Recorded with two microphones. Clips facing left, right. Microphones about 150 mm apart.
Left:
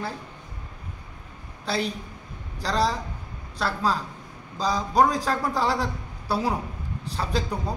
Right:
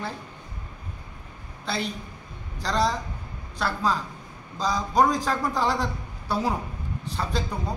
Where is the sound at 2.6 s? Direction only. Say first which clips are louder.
Even; 5° left (ahead or behind).